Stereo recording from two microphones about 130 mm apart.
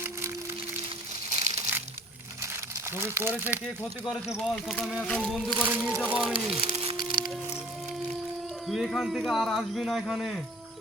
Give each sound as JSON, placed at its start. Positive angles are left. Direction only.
{"t": 1.3, "sound": "crushing", "side_deg": -60}
{"t": 2.4, "sound": "crumpling", "side_deg": -20}
{"t": 4.0, "sound": "speech", "side_deg": 0}
{"t": 5.6, "sound": "speech", "side_deg": -15}
{"t": 6.3, "sound": "speech", "side_deg": -45}
{"t": 6.9, "sound": "music", "side_deg": -35}
{"t": 8.6, "sound": "speech", "side_deg": 0}